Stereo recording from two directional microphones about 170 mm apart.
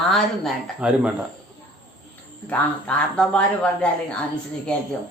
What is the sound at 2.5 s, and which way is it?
Speech, 5° left (ahead or behind).